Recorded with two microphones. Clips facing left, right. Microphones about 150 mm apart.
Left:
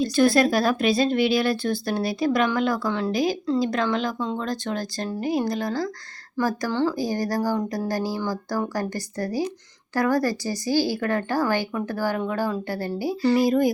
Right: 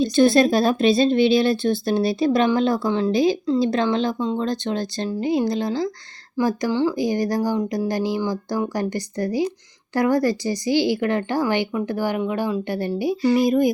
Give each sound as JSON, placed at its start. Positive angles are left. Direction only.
{"t": 0.0, "sound": "a woman's voice", "side_deg": -25}